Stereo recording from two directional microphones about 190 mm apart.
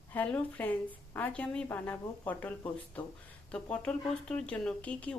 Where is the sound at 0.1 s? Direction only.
10° left (ahead or behind).